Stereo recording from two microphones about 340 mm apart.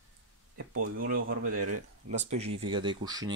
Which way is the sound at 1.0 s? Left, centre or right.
Right.